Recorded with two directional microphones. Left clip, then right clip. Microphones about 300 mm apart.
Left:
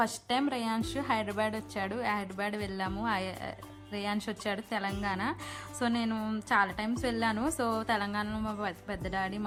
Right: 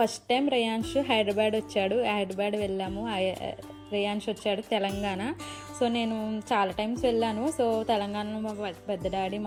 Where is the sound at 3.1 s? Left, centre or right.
Left.